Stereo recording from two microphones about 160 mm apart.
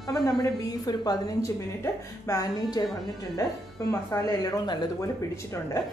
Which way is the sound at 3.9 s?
20° left (ahead or behind).